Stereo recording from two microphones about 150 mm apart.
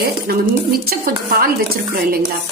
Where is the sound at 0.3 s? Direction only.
80° right.